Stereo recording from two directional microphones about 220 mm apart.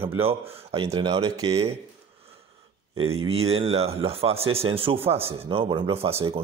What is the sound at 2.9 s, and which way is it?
Speech, 25° right (ahead or behind).